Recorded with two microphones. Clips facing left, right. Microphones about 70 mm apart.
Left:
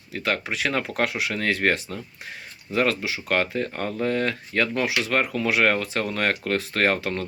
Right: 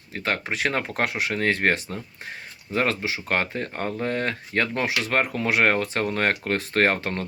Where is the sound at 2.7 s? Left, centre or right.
Right.